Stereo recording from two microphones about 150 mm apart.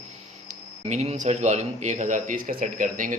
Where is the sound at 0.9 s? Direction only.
50° right (ahead or behind).